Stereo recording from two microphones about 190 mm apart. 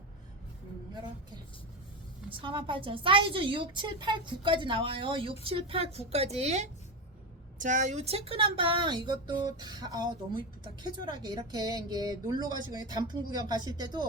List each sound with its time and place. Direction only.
2.3 s a woman's voice: 25° right (ahead or behind)